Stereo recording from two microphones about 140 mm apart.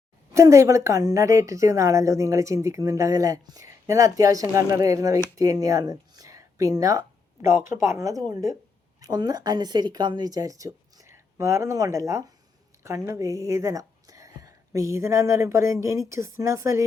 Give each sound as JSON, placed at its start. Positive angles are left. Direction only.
{"t": 0.3, "sound": "a woman's voice", "side_deg": -20}